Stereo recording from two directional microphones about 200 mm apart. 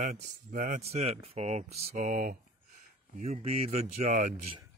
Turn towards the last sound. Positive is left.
turn(degrees=-35)  # may be behind; listen again after turning